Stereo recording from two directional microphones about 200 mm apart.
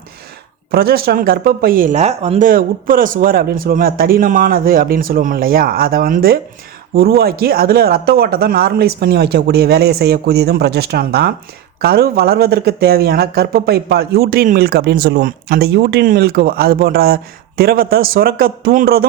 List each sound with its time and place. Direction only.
0.7 s speech: 50° right (ahead or behind)